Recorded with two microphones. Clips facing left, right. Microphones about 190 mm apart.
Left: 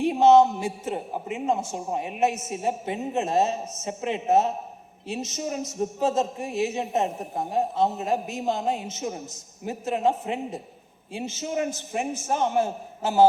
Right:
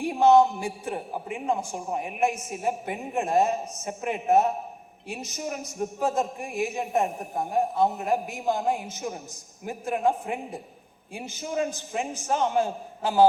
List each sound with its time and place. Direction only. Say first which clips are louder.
0.0 s a man's voice: left 2 dB; 20° left (ahead or behind)